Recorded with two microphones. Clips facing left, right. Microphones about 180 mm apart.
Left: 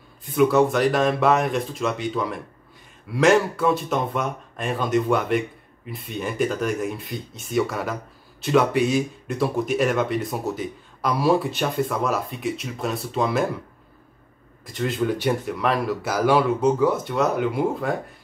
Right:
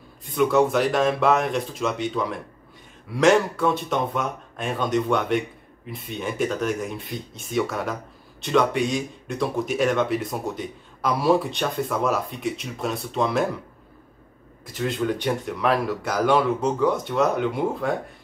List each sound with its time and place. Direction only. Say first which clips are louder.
0.2 s speech: left 2 dB; centre (ahead or behind)
14.7 s speech: left 1 dB; centre (ahead or behind)